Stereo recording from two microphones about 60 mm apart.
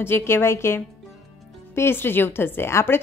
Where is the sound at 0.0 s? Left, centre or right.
Left.